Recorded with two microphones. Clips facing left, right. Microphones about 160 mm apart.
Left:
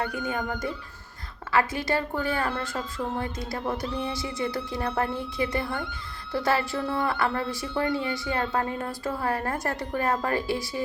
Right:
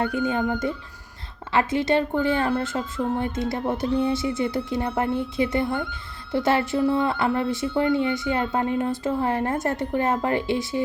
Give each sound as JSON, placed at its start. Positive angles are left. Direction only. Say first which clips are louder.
{"t": 0.0, "sound": "a woman's voice", "louder": "right 6 dB", "side_deg": -25}
{"t": 1.5, "sound": "a woman's voice", "louder": "right 4 dB", "side_deg": -25}